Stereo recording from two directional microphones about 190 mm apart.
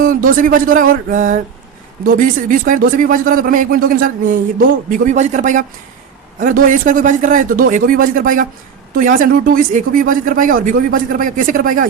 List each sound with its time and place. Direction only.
0.0 s speech: 45° right (ahead or behind)